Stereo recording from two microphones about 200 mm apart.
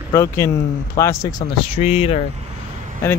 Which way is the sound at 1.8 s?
30° left (ahead or behind).